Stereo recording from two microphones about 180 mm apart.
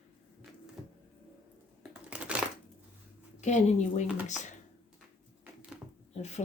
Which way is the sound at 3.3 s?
40° left (ahead or behind).